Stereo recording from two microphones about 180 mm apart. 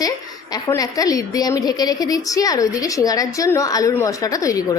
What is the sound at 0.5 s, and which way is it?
A woman's voice, 20° left (ahead or behind).